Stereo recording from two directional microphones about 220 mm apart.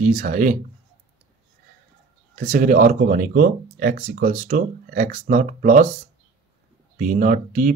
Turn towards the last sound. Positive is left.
turn(degrees=-35)  # may be behind; listen again after turning